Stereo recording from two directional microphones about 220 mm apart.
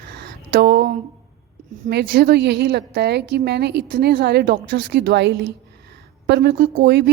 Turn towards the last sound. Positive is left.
turn(degrees=-50)  # may be behind; listen again after turning